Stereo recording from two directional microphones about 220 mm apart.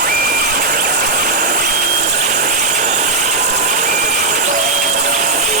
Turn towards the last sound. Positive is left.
turn(degrees=-35)  # may be behind; listen again after turning